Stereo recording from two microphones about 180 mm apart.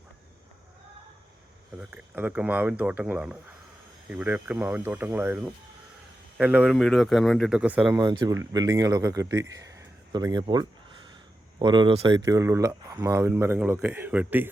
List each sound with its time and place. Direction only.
1.8 s speech: 10° right (ahead or behind)
8.0 s speech: 25° right (ahead or behind)